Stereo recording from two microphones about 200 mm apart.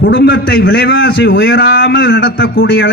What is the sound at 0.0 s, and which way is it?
A man's voice, 65° left (ahead or behind).